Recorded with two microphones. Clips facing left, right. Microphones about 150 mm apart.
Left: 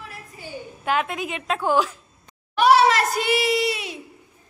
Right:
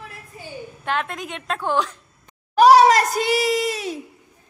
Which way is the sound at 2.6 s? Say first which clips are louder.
Right 4 dB; 40° right (ahead or behind).